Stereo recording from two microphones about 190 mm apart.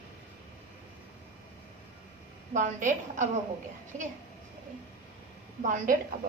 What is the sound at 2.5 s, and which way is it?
Speech, 40° right (ahead or behind).